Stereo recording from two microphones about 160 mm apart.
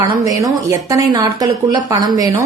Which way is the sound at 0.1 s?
20° right (ahead or behind).